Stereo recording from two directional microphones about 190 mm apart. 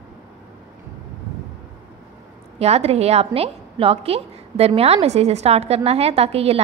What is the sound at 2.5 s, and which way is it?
A woman's voice, 35° right (ahead or behind).